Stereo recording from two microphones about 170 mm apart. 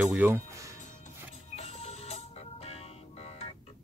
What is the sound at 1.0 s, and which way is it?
Music, 40° left (ahead or behind).